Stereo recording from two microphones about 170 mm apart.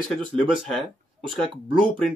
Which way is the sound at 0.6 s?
Centre (ahead or behind).